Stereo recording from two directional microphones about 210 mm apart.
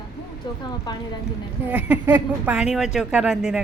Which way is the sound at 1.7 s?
5° right (ahead or behind).